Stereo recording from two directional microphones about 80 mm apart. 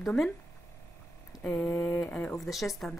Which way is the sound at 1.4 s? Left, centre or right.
Centre.